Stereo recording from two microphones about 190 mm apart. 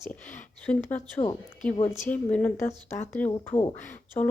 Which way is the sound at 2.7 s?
35° left (ahead or behind).